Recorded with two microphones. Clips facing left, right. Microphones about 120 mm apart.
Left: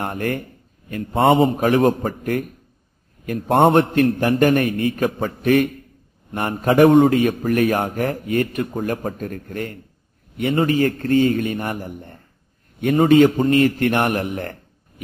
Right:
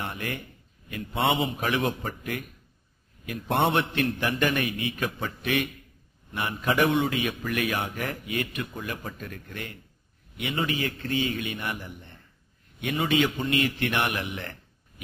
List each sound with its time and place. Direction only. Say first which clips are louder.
0.0 s a man's voice: left 10 dB; 45° left (ahead or behind)